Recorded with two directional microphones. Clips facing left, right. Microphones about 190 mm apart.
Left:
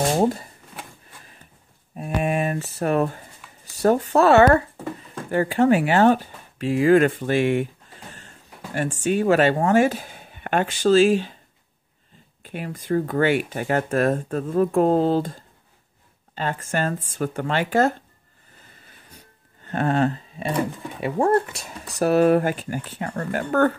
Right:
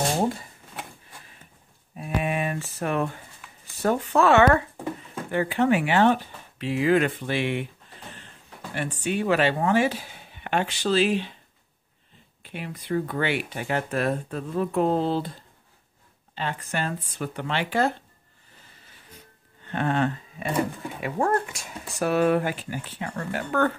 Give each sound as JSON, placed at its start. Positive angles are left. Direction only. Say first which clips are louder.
{"t": 2.0, "sound": "a sound", "louder": "left 4 dB", "side_deg": 45}
{"t": 3.6, "sound": "speech", "louder": "left 5 dB", "side_deg": 40}
{"t": 9.0, "sound": "speech", "louder": "left 5 dB", "side_deg": 45}
{"t": 12.4, "sound": "speech", "louder": "left 5 dB", "side_deg": 45}
{"t": 16.3, "sound": "speech", "louder": "left 4 dB", "side_deg": 45}
{"t": 19.6, "sound": "speech", "louder": "left 4 dB", "side_deg": 40}